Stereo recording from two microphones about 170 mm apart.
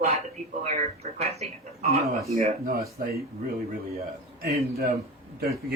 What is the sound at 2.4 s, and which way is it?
Speech, 55° right (ahead or behind).